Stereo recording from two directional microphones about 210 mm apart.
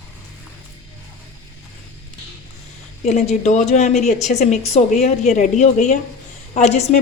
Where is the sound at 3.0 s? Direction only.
30° left (ahead or behind).